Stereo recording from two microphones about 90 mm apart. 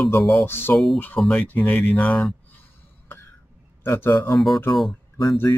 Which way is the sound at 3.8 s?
30° left (ahead or behind).